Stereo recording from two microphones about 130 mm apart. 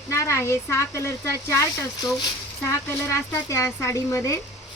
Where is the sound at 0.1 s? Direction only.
20° left (ahead or behind).